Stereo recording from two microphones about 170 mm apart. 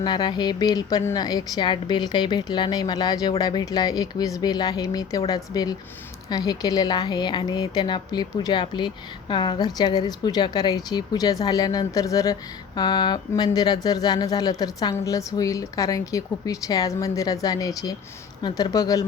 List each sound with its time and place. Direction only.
0.0 s a woman's voice: 25° left (ahead or behind)